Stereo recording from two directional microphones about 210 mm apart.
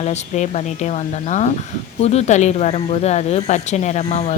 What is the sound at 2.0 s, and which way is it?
A woman's voice, 30° left (ahead or behind).